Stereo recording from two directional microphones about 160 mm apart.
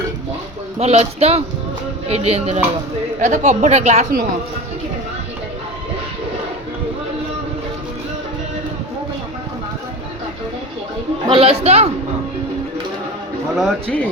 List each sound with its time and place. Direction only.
0.8 s a woman's voice: 40° right (ahead or behind)
11.3 s speech: 35° right (ahead or behind)
13.6 s speech: 5° left (ahead or behind)